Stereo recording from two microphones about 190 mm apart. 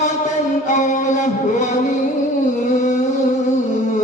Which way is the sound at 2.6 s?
40° left (ahead or behind).